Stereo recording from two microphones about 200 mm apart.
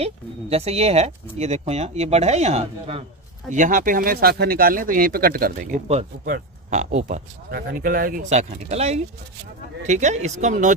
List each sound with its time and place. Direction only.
0.0 s speech: 30° right (ahead or behind)